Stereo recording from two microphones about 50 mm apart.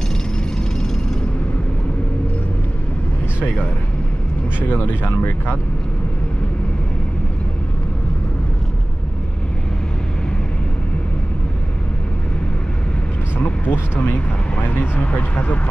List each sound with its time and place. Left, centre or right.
4.6 s speech: left
13.4 s a sound: left
15.0 s speech: left